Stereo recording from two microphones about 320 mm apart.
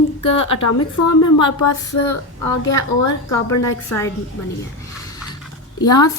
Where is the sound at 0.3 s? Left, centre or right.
Left.